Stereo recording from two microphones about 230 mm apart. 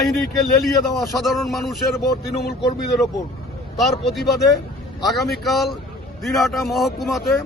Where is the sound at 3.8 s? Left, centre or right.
Centre.